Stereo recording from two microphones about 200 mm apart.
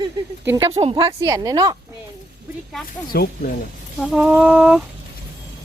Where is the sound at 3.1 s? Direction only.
45° left (ahead or behind).